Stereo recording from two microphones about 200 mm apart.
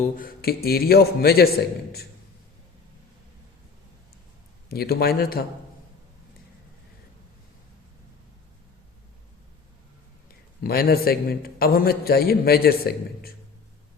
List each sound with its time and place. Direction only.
0.0 s a man's voice: 45° left (ahead or behind)
4.7 s a man's voice: 50° left (ahead or behind)
10.6 s a man's voice: 50° left (ahead or behind)